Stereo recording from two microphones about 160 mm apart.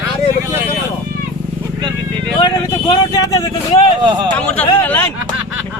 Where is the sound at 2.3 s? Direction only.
25° left (ahead or behind).